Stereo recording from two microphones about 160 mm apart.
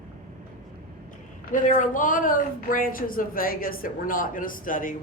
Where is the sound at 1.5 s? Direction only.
55° left (ahead or behind).